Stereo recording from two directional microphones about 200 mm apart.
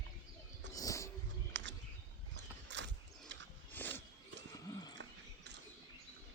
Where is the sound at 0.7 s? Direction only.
15° left (ahead or behind).